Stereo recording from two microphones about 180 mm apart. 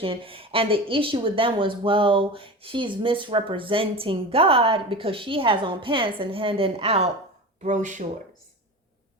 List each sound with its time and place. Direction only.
0.0 s speech: 30° right (ahead or behind)
7.6 s speech: 40° right (ahead or behind)